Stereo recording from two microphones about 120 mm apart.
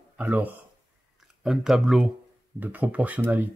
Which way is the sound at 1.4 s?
5° right (ahead or behind).